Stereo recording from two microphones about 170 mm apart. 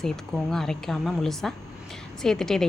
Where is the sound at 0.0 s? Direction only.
Centre (ahead or behind).